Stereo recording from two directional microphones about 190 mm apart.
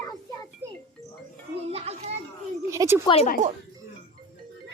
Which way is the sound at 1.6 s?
35° right (ahead or behind).